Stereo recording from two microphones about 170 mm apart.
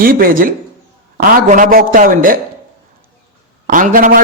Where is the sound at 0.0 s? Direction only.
55° right (ahead or behind).